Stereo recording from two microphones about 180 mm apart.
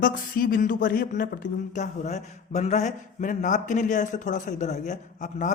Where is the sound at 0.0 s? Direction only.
50° left (ahead or behind).